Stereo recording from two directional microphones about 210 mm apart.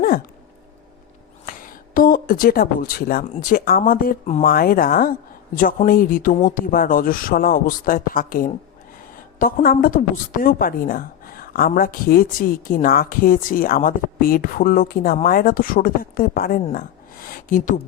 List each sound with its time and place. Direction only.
1.5 s a woman's voice: 40° left (ahead or behind)